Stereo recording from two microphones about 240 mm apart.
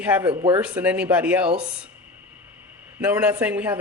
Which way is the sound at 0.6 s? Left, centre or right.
Centre.